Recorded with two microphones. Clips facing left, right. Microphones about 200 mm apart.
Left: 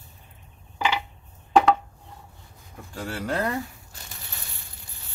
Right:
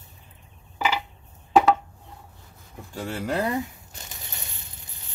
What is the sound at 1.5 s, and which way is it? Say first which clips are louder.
Chopping: even; 5° right (ahead or behind).